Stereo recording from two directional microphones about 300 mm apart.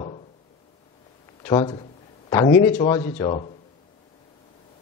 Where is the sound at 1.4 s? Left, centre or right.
Centre.